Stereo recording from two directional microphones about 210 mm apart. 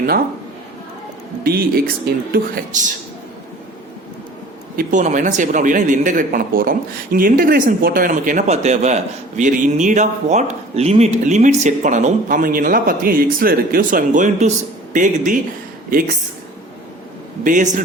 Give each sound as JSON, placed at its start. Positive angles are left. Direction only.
{"t": 1.5, "sound": "speech", "side_deg": -50}
{"t": 4.8, "sound": "speech", "side_deg": -35}
{"t": 17.4, "sound": "speech", "side_deg": -40}